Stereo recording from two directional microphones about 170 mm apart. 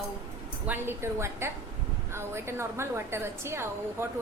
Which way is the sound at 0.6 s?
10° right (ahead or behind).